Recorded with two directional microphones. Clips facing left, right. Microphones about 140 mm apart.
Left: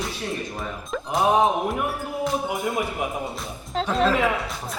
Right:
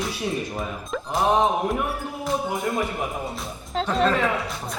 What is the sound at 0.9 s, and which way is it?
Speech, centre (ahead or behind).